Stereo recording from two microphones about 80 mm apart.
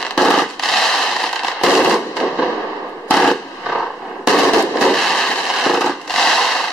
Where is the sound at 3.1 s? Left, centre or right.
Centre.